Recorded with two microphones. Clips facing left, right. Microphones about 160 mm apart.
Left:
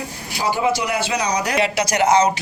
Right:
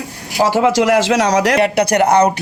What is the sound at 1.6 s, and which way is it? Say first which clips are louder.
Speech: right 6 dB; 55° right (ahead or behind).